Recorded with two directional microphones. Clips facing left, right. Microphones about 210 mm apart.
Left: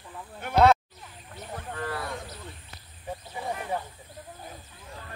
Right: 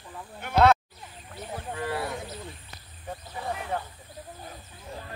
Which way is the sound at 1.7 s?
20° right (ahead or behind).